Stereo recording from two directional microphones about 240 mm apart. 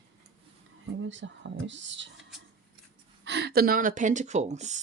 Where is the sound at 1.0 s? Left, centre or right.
Right.